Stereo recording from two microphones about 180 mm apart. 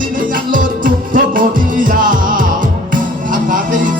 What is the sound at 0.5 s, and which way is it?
Music, 45° right (ahead or behind).